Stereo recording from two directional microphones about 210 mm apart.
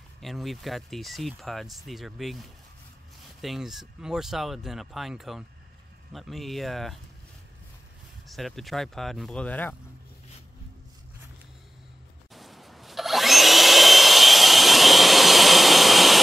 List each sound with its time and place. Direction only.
0.2 s speech: centre (ahead or behind)
8.3 s speech: centre (ahead or behind)
12.4 s vacuum cleaner: centre (ahead or behind)